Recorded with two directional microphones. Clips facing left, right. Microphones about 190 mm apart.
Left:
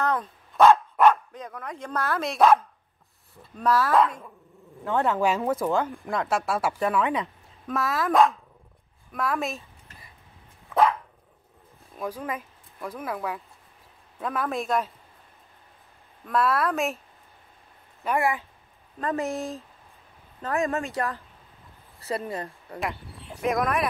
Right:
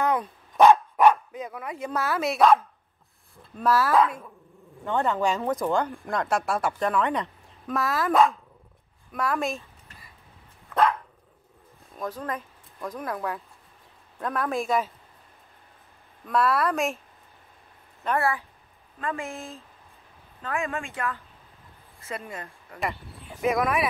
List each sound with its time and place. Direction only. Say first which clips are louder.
0.0 s speech: right 2 dB; 10° right (ahead or behind)
12.0 s speech: even; 10° left (ahead or behind)
16.3 s speech: even; centre (ahead or behind)
18.0 s speech: left 1 dB; 15° left (ahead or behind)
18.9 s speech: left 5 dB; 40° left (ahead or behind)
22.8 s speech: even; centre (ahead or behind)